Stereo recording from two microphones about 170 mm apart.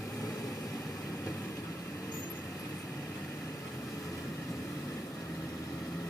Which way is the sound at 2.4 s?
Centre (ahead or behind).